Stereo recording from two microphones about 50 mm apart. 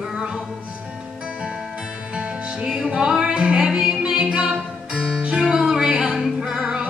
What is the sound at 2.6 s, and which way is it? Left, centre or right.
Music, centre.